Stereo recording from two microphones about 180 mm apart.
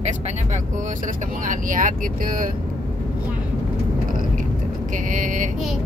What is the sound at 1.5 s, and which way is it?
Speech, 45° right (ahead or behind).